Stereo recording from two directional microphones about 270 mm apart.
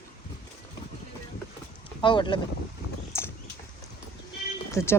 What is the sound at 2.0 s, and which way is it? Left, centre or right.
Speech, centre.